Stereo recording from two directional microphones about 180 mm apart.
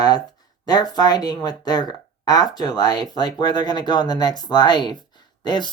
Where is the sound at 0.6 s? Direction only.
20° left (ahead or behind).